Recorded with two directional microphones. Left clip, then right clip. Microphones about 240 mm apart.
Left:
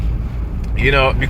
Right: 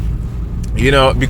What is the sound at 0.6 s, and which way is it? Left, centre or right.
Speech, right.